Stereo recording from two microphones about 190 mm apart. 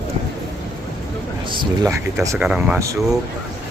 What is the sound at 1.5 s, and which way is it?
Speech, 25° right (ahead or behind).